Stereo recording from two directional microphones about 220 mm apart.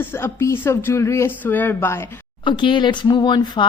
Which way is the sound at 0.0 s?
10° left (ahead or behind).